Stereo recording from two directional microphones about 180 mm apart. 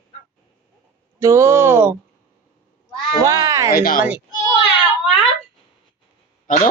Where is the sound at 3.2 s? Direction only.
20° right (ahead or behind).